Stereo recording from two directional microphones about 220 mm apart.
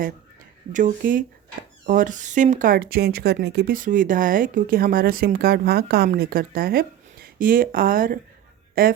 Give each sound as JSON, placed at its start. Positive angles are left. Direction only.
{"t": 0.7, "sound": "speech", "side_deg": -35}